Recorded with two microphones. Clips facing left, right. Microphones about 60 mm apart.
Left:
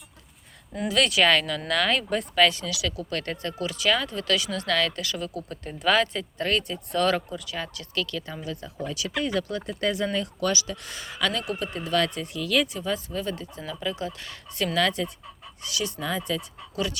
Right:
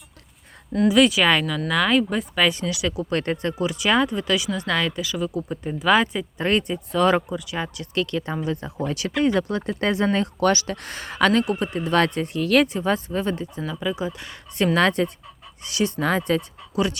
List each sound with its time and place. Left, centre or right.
0.9 s speech: centre
2.5 s speech: right
4.9 s speech: centre; by 8.4 s right
8.9 s speech: right
9.2 s speech: right
13.6 s speech: centre
14.6 s speech: right
16.0 s speech: right
16.7 s speech: right